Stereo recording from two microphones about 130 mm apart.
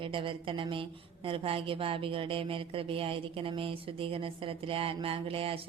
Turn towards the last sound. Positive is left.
turn(degrees=-45)  # may be behind; listen again after turning